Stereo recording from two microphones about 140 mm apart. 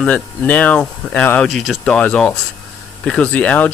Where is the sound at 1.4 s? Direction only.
Centre (ahead or behind).